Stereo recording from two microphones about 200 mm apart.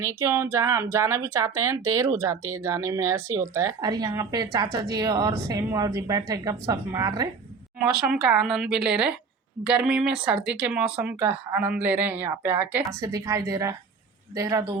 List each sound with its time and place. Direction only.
0.0 s speech: 15° right (ahead or behind)
7.9 s speech: 5° right (ahead or behind)